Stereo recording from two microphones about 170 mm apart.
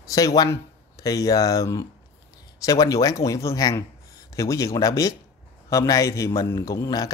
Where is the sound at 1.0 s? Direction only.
20° left (ahead or behind).